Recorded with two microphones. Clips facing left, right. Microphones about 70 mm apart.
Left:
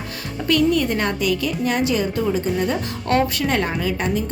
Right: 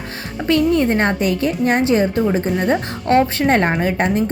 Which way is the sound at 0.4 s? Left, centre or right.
Right.